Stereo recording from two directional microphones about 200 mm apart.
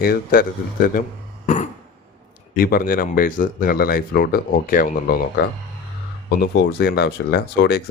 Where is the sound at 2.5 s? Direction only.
45° left (ahead or behind).